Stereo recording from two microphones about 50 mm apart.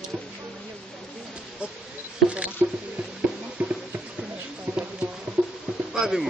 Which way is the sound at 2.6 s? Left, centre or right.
Right.